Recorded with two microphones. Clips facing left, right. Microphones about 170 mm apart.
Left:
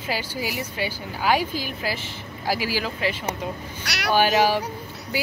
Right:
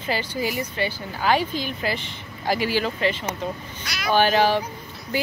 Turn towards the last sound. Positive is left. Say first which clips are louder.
# right 1 dB
turn(degrees=10)  # may be behind; listen again after turning